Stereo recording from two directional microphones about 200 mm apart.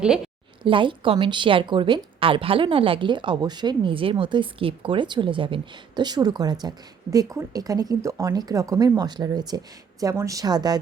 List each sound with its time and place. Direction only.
0.6 s a woman's voice: 25° right (ahead or behind)